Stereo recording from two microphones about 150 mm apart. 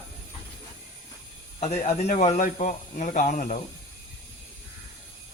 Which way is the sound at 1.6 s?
50° left (ahead or behind).